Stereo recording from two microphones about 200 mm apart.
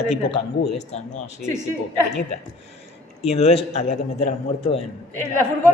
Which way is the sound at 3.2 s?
30° left (ahead or behind).